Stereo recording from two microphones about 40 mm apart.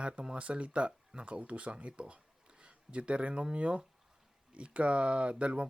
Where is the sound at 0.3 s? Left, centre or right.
Right.